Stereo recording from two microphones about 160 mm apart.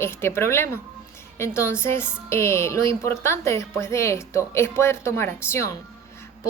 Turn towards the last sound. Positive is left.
turn(degrees=15)  # may be behind; listen again after turning